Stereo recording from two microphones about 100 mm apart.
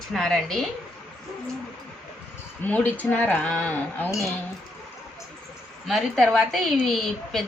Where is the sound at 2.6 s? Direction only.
15° left (ahead or behind).